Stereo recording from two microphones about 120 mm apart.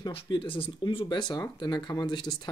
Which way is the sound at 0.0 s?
45° left (ahead or behind).